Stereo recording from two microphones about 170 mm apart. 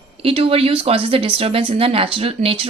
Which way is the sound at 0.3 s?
35° right (ahead or behind).